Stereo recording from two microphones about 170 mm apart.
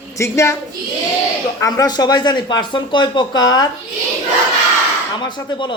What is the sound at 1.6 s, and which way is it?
Speech, 20° left (ahead or behind).